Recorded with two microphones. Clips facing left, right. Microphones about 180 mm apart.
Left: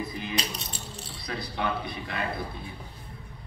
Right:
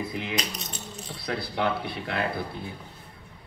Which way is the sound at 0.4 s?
30° left (ahead or behind).